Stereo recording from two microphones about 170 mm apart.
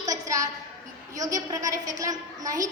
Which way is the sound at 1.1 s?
20° right (ahead or behind).